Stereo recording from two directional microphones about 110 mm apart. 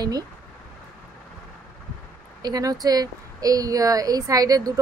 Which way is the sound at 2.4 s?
35° right (ahead or behind).